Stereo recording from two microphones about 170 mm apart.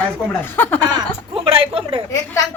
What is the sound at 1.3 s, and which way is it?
Speech, 35° right (ahead or behind).